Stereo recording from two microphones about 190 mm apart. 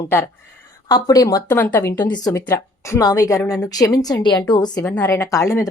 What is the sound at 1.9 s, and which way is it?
A woman's voice, 20° left (ahead or behind).